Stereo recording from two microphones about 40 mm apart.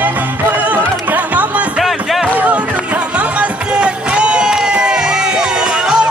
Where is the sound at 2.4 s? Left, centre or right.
Right.